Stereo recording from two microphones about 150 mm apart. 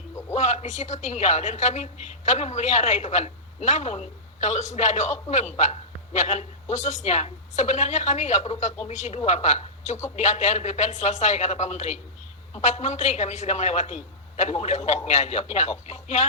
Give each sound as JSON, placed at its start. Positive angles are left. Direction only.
{"t": 0.3, "sound": "a woman's voice", "side_deg": 50}